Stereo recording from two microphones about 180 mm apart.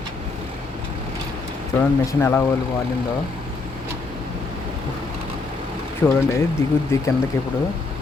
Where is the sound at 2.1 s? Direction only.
10° left (ahead or behind).